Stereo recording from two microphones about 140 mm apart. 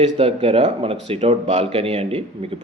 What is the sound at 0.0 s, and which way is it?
Speech, 45° right (ahead or behind).